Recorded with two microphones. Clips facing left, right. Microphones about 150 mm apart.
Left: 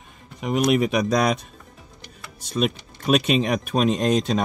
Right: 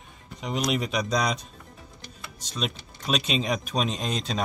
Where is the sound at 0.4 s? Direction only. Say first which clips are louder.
Left 7 dB; 55° left (ahead or behind).